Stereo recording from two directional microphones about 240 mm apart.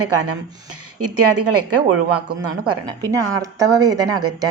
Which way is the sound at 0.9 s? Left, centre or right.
Right.